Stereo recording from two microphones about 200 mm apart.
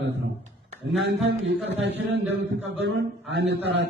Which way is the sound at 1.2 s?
60° right (ahead or behind).